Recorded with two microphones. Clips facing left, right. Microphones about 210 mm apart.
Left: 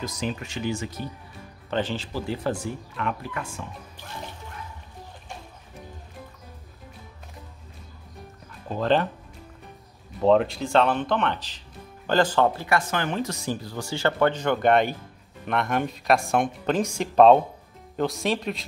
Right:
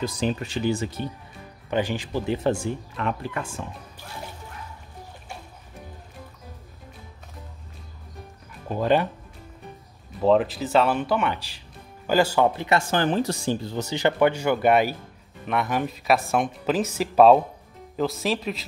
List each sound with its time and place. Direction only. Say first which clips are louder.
0.0 s speech: right 4 dB; 30° right (ahead or behind)
1.7 s speech: right 2 dB; 10° right (ahead or behind); by 3.4 s 30° right (ahead or behind)
8.6 s speech: right 1 dB; 10° right (ahead or behind)
10.2 s speech: even; centre (ahead or behind)
12.6 s speech: right 3 dB; 30° right (ahead or behind); by 18.6 s centre (ahead or behind)